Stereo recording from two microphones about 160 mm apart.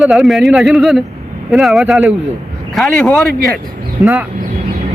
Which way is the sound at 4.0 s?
20° right (ahead or behind).